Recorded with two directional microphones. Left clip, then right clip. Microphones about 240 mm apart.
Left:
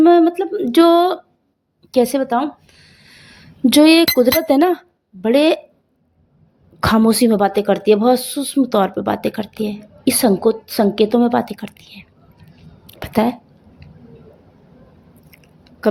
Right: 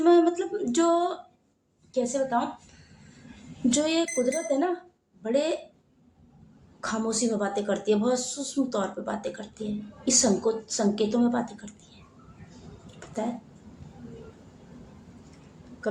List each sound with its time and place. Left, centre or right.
0.0 s a woman's voice: left
3.7 s a woman's voice: left
6.7 s a woman's voice: left